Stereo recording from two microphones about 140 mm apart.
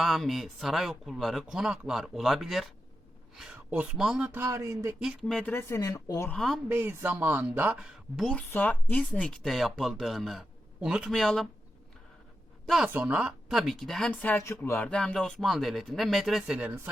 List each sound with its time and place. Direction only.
0.0 s speech: centre (ahead or behind)
4.3 s speech: 15° right (ahead or behind)
4.9 s speech: 5° right (ahead or behind)
5.4 s speech: 15° left (ahead or behind)
6.3 s speech: centre (ahead or behind)
6.7 s speech: 15° right (ahead or behind)
8.4 s speech: 15° left (ahead or behind)
12.6 s a woman's voice: centre (ahead or behind)
12.9 s speech: 10° right (ahead or behind)
14.1 s speech: 10° left (ahead or behind); by 16.9 s 15° right (ahead or behind)